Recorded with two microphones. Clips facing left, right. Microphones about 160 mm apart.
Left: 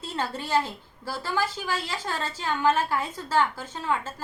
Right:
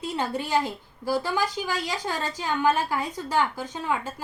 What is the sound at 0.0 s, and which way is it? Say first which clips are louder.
A woman's voice: right 3 dB; 15° right (ahead or behind).